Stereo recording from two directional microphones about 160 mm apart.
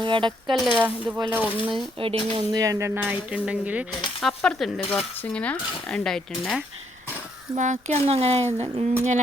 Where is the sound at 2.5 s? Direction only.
20° right (ahead or behind).